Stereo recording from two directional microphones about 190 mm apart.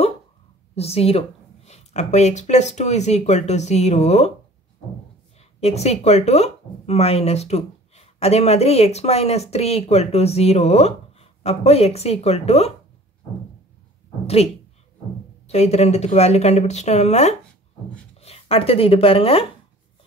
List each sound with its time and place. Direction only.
0.7 s speech: 30° left (ahead or behind)
5.4 s speech: 35° left (ahead or behind)
14.2 s a woman's voice: 30° left (ahead or behind)